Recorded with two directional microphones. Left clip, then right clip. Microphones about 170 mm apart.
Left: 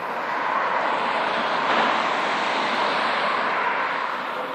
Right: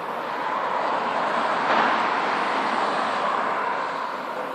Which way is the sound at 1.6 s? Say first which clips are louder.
Even; 50° left (ahead or behind).